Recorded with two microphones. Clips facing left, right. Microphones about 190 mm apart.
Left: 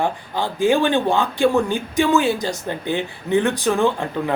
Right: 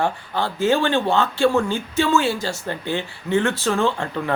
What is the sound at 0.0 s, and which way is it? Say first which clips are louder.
Speech: even; 15° left (ahead or behind).